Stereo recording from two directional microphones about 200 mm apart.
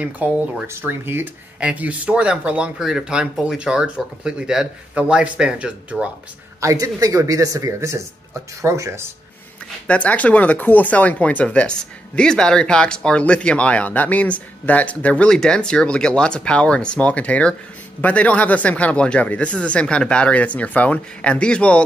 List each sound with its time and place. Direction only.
0.0 s speech: 5° right (ahead or behind)
9.8 s speech: 5° left (ahead or behind)